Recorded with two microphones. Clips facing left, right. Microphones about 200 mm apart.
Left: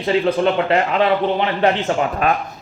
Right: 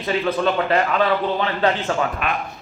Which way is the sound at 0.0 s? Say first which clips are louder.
Left 4 dB; 25° left (ahead or behind).